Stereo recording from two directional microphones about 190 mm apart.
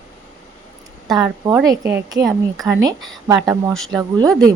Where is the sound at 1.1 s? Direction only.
15° right (ahead or behind).